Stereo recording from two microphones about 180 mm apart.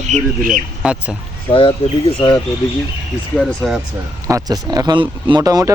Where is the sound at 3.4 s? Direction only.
Centre (ahead or behind).